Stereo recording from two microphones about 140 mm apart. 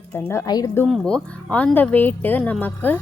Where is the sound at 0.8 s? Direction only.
5° left (ahead or behind).